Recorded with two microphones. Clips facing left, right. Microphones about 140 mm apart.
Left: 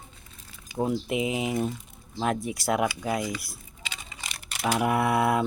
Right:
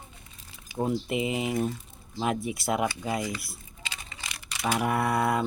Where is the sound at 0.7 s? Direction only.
Centre (ahead or behind).